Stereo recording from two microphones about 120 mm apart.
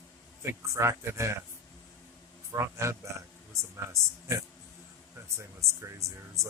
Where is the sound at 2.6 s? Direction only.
25° right (ahead or behind).